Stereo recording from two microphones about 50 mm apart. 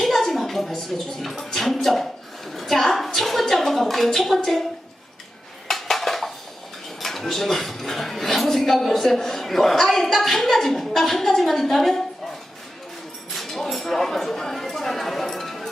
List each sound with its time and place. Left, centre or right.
0.0 s a sound: centre
1.5 s music: centre
2.6 s a sound: centre
4.4 s a woman's voice: centre
5.6 s dishes: centre
7.0 s speech: centre
13.3 s speech: centre